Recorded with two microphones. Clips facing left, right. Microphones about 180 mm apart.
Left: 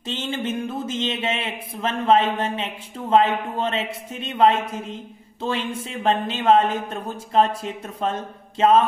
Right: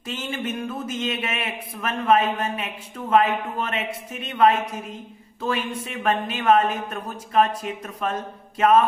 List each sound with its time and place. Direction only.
0.0 s a man's voice: 25° left (ahead or behind)